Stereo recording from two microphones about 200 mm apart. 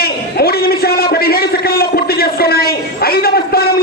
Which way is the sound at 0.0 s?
50° left (ahead or behind).